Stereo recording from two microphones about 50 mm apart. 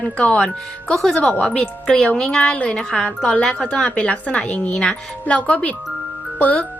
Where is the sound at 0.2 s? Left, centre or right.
Left.